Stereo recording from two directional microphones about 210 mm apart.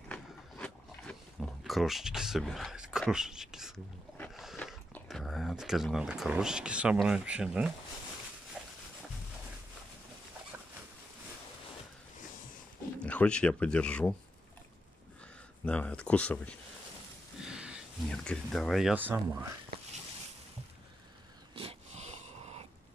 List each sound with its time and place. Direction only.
0.1 s a sound: 5° left (ahead or behind)
8.6 s dog: centre (ahead or behind)
13.0 s speech: 5° left (ahead or behind)
15.6 s speech: 5° left (ahead or behind)
17.5 s speech: 5° right (ahead or behind)
21.5 s dog: 30° right (ahead or behind)